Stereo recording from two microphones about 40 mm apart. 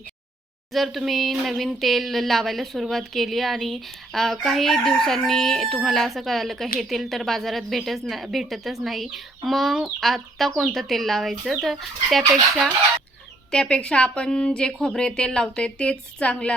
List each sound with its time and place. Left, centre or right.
0.7 s speech: centre
13.5 s a woman's voice: left